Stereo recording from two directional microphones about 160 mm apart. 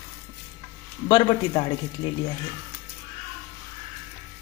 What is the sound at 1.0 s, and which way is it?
Speech, 30° left (ahead or behind).